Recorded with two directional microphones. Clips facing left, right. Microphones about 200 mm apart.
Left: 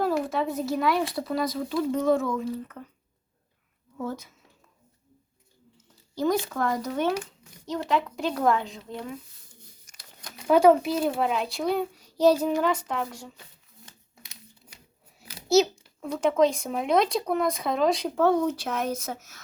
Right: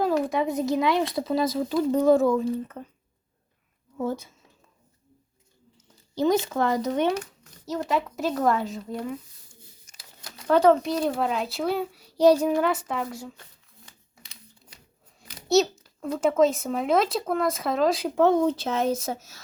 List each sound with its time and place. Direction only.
0.0 s a woman's voice: 15° right (ahead or behind)
3.9 s speech: 25° right (ahead or behind)
5.7 s speech: 20° right (ahead or behind)
7.6 s a child's voice: 5° right (ahead or behind)
10.4 s a child's voice: 10° left (ahead or behind); by 13.3 s 5° right (ahead or behind)
15.2 s a child's voice: 5° left (ahead or behind)
18.2 s speech: 20° right (ahead or behind)